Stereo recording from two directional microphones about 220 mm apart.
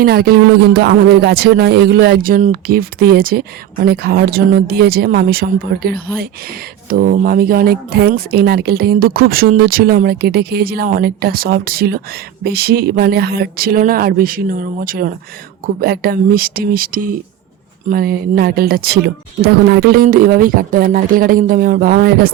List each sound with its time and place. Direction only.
0.0 s speech: 45° right (ahead or behind)